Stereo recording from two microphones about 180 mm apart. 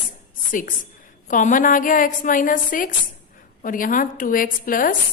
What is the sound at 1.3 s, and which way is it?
A woman's voice, 45° left (ahead or behind).